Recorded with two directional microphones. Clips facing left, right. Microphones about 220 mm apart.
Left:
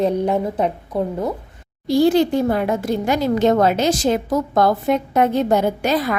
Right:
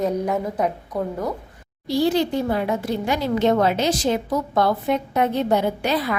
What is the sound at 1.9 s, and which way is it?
Speech, 50° left (ahead or behind).